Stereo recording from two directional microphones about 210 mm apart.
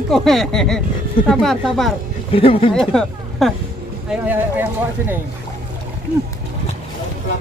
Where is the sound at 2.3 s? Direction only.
25° left (ahead or behind).